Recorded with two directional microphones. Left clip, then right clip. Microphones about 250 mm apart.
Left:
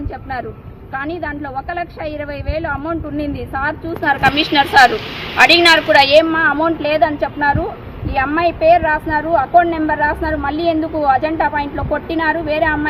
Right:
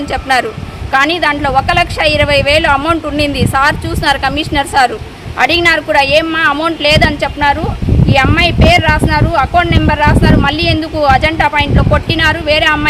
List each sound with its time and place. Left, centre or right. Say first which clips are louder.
0.1 s speech: right 16 dB; right
6.0 s a woman's voice: right 1 dB; centre
6.3 s speech: right 3 dB; right